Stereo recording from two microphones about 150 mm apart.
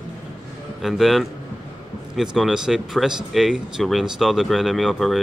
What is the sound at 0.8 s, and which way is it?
Speech, centre (ahead or behind).